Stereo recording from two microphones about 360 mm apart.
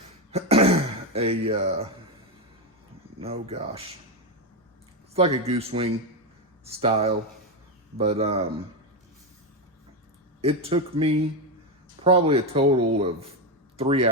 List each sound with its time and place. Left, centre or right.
0.3 s throat clearing: centre
3.2 s speech: centre
5.1 s speech: centre
10.4 s speech: centre